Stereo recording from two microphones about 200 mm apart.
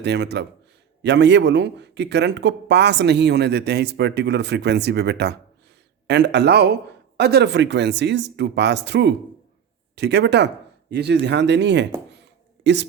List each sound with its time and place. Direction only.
0.0 s a man's voice: 60° right (ahead or behind)